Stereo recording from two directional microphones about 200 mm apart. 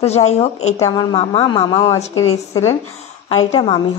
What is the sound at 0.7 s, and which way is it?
A woman's voice, 20° left (ahead or behind).